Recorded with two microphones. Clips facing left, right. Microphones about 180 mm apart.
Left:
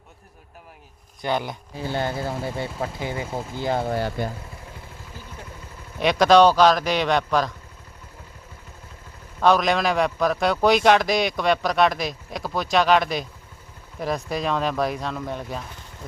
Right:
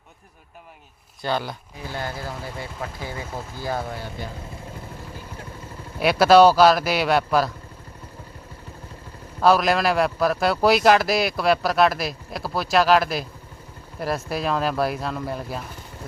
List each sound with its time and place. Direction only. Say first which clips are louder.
1.2 s speech: left 1 dB; 20° left (ahead or behind)
4.2 s speech: left 6 dB; 55° left (ahead or behind)
6.0 s speech: right 1 dB; 5° right (ahead or behind)
9.4 s speech: right 1 dB; 5° right (ahead or behind)
14.3 s speech: right 1 dB; 5° right (ahead or behind)